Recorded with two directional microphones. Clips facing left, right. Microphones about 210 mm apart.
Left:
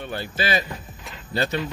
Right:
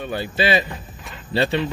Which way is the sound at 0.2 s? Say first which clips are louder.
Right 5 dB; 20° right (ahead or behind).